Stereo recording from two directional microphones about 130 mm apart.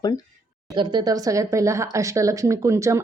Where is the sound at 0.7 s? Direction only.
35° right (ahead or behind).